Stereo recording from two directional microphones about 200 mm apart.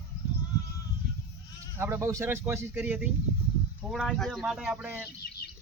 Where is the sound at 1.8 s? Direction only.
15° right (ahead or behind).